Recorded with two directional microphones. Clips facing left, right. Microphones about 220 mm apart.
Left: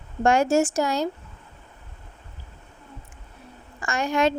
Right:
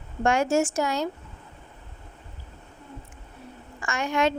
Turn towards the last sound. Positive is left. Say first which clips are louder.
# left 2 dB
turn(degrees=35)  # may be behind; listen again after turning